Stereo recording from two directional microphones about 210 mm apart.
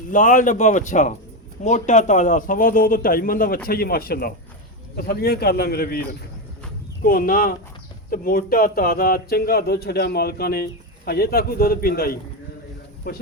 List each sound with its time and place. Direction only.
0.1 s a man's voice: 35° left (ahead or behind)